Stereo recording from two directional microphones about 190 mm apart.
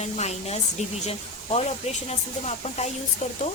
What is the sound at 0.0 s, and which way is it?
Speech, 35° left (ahead or behind).